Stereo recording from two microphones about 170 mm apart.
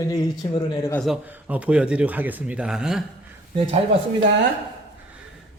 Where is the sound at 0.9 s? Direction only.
Centre (ahead or behind).